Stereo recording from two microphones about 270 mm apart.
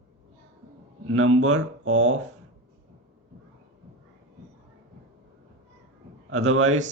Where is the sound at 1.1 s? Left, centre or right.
Right.